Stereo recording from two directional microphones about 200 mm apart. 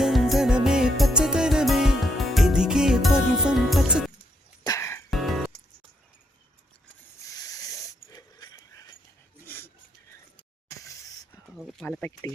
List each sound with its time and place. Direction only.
0.0 s music: centre (ahead or behind)
4.6 s music: 15° left (ahead or behind)
5.1 s music: centre (ahead or behind)
7.3 s wheeze: 15° left (ahead or behind)
9.5 s filing: 10° left (ahead or behind)
10.7 s a sound: 15° left (ahead or behind)
11.5 s a sound: centre (ahead or behind)